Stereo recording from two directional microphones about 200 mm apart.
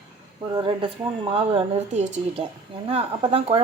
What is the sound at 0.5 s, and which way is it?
Speech, 25° right (ahead or behind).